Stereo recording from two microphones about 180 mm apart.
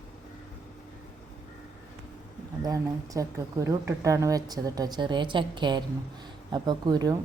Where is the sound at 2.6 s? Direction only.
20° right (ahead or behind).